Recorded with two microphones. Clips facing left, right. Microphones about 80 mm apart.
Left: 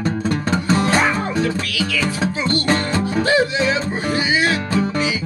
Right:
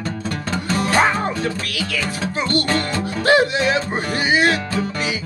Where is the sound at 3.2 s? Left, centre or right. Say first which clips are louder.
Right 4 dB; right.